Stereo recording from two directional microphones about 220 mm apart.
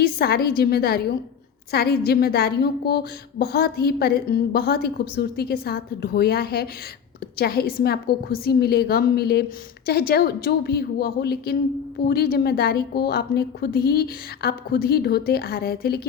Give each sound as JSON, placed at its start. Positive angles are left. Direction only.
{"t": 0.0, "sound": "a woman's voice", "side_deg": 45}